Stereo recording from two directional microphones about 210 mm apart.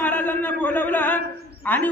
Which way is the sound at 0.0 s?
10° left (ahead or behind).